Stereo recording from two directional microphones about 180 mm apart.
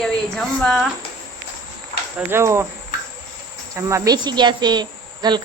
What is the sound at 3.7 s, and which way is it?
Speech, 15° right (ahead or behind).